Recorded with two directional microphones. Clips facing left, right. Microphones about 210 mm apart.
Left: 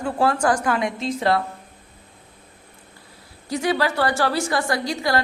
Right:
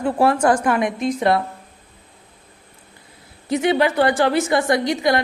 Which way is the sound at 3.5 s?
20° right (ahead or behind).